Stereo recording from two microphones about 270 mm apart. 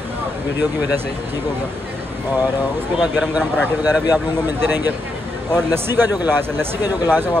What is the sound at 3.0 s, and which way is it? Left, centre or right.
Speech, centre.